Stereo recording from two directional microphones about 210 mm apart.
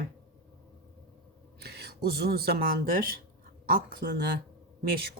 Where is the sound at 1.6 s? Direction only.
50° right (ahead or behind).